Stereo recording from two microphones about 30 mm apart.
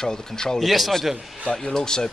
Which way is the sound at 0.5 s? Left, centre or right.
Centre.